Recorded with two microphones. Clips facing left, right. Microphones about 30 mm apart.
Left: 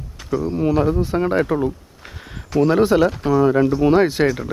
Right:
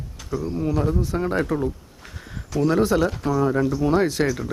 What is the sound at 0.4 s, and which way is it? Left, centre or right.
Speech, left.